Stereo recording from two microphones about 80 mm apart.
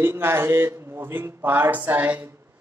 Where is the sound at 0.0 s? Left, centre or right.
Right.